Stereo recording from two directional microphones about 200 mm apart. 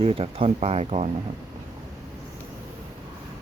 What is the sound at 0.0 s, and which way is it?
Speech, 30° right (ahead or behind).